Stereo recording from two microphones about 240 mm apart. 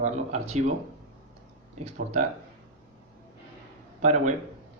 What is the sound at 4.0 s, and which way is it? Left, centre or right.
Speech, right.